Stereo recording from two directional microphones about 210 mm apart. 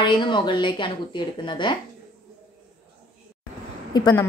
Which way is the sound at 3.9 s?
20° left (ahead or behind).